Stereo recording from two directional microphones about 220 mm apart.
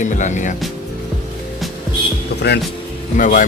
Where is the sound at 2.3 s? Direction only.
50° left (ahead or behind).